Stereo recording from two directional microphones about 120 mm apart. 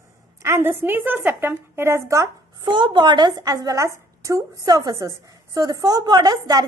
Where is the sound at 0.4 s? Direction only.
20° right (ahead or behind).